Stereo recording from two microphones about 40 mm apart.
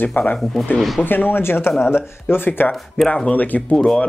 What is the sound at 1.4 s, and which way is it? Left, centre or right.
Speech, left.